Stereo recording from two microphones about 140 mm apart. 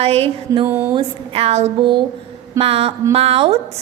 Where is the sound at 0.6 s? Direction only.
15° right (ahead or behind).